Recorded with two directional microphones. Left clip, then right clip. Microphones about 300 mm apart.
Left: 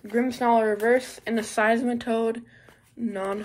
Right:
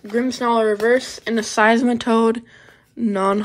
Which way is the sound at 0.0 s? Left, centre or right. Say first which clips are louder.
Right 4 dB; centre.